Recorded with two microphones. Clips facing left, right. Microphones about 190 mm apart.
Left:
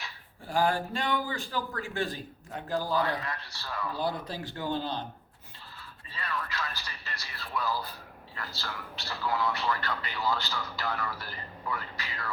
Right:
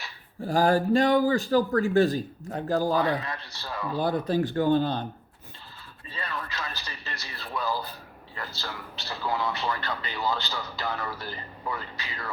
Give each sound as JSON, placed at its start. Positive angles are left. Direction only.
{"t": 0.4, "sound": "speech", "side_deg": -40}
{"t": 3.4, "sound": "a man's voice", "side_deg": -20}
{"t": 3.9, "sound": "speech", "side_deg": -50}
{"t": 6.1, "sound": "a man's voice", "side_deg": -20}